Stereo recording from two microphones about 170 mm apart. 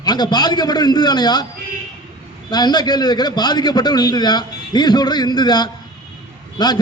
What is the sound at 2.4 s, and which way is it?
A man's voice, 25° left (ahead or behind).